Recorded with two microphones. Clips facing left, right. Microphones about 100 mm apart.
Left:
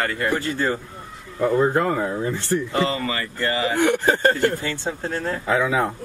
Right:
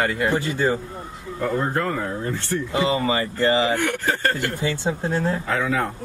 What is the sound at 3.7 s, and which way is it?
Speech, 20° left (ahead or behind).